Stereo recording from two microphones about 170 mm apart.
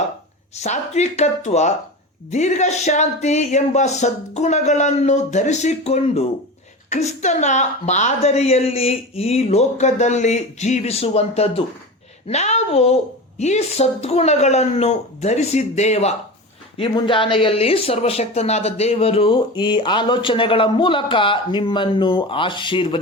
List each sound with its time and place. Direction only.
0.5 s speech: 40° left (ahead or behind)